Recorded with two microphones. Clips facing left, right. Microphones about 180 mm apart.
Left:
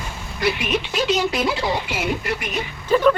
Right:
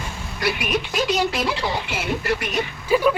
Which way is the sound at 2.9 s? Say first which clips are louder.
Left 2 dB; 10° right (ahead or behind).